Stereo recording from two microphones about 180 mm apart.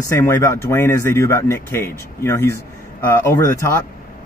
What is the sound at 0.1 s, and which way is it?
Speech, 15° left (ahead or behind).